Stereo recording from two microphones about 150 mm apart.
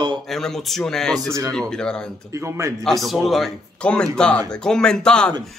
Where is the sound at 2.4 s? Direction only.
20° right (ahead or behind).